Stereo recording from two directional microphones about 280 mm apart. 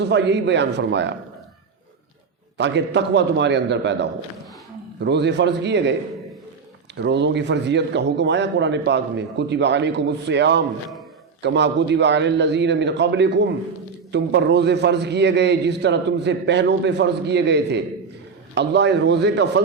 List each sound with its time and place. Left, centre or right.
0.0 s a man's voice: right
2.6 s a man's voice: right
6.9 s a man's voice: right